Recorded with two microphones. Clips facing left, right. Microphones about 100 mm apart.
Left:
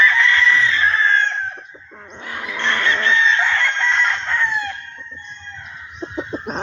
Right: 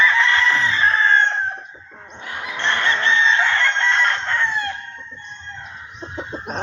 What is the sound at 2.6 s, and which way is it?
Chicken, 25° right (ahead or behind).